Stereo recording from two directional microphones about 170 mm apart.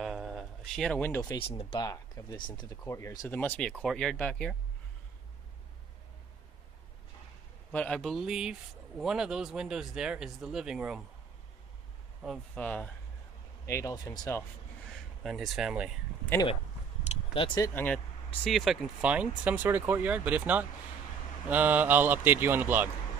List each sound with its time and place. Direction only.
0.0 s a sound: centre (ahead or behind)
1.3 s speech: 35° left (ahead or behind)
1.8 s speech: 20° left (ahead or behind)
3.3 s speech: 10° left (ahead or behind)
7.7 s speech: 5° left (ahead or behind)
12.2 s speech: 5° left (ahead or behind); by 14.4 s 20° left (ahead or behind)
15.2 s speech: centre (ahead or behind)
17.0 s a sound: 35° left (ahead or behind)
17.6 s speech: 10° left (ahead or behind); by 22.8 s 10° right (ahead or behind)